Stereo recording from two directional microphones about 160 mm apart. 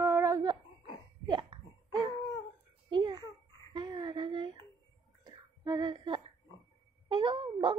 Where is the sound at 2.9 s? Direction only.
30° right (ahead or behind).